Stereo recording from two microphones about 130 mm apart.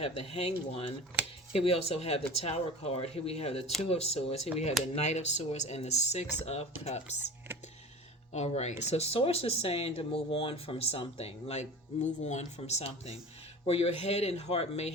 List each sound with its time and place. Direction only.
0.0 s speech: 45° left (ahead or behind)